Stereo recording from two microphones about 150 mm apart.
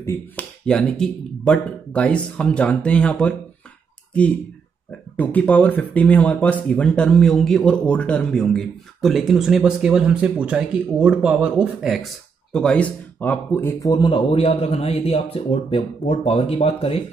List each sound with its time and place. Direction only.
0.0 s speech: 20° left (ahead or behind)
0.7 s speech: 5° left (ahead or behind)
5.1 s speech: 10° left (ahead or behind); by 17.0 s 40° left (ahead or behind)